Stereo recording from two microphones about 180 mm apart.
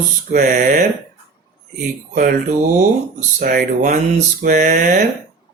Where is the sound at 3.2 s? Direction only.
50° right (ahead or behind).